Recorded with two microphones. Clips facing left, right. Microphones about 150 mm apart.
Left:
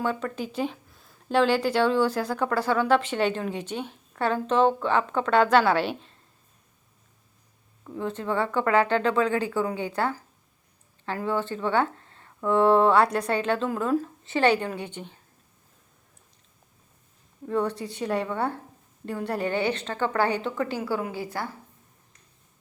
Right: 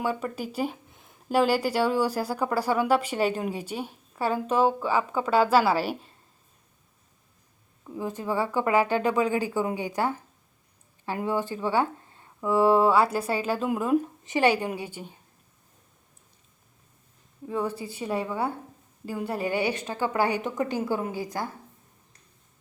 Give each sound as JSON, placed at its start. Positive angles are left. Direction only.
{"t": 0.0, "sound": "speech", "side_deg": -10}
{"t": 0.9, "sound": "a sound", "side_deg": -20}
{"t": 1.3, "sound": "speech", "side_deg": -10}
{"t": 7.9, "sound": "speech", "side_deg": -10}
{"t": 17.4, "sound": "a woman's voice", "side_deg": -5}